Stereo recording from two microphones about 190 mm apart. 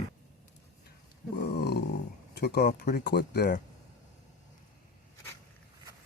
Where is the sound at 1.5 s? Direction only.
60° left (ahead or behind).